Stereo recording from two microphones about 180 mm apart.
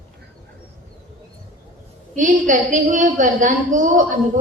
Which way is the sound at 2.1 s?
45° right (ahead or behind).